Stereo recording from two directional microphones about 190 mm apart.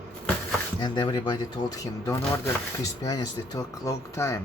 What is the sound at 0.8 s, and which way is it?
Speech, 25° left (ahead or behind).